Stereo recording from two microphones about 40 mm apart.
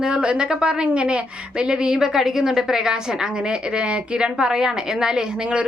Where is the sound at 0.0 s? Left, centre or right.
Centre.